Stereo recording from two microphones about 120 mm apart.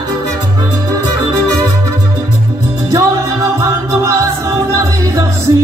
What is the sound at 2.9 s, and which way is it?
Music, 25° right (ahead or behind).